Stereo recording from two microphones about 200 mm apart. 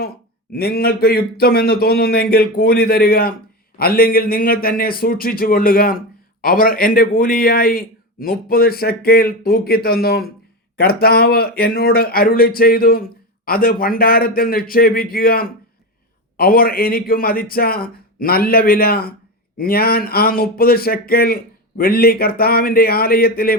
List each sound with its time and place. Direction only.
0.5 s speech: 50° left (ahead or behind)